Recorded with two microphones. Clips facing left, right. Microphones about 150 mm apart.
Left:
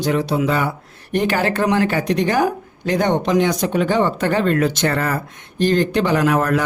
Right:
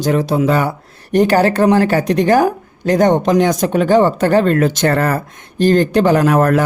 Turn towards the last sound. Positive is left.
turn(degrees=-45)  # may be behind; listen again after turning